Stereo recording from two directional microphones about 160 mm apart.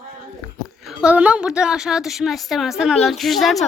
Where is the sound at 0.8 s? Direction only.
5° right (ahead or behind).